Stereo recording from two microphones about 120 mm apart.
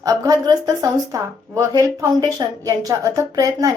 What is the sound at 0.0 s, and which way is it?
Speech, 30° right (ahead or behind).